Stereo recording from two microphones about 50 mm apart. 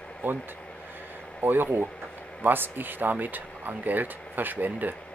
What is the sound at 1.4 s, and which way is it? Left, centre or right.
Speech, right.